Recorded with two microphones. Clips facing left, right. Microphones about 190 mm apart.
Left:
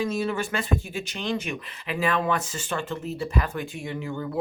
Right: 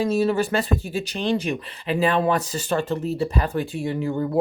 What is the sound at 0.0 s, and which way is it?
Speech, 35° right (ahead or behind).